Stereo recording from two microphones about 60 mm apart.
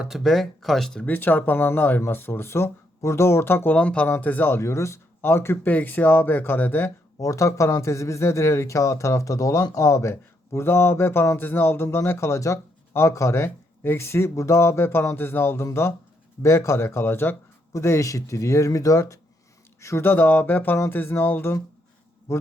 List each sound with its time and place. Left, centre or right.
0.2 s speech: centre
1.0 s speech: left
3.8 s speech: left
4.4 s speech: left
5.6 s speech: left
7.2 s speech: left
17.7 s speech: left
20.1 s speech: left